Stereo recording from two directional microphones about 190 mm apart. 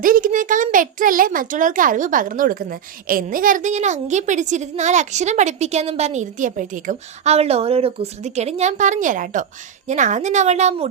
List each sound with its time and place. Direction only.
0.0 s a child's voice: 45° right (ahead or behind)